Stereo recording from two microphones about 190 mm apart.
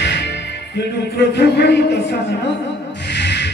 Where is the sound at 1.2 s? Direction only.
60° left (ahead or behind).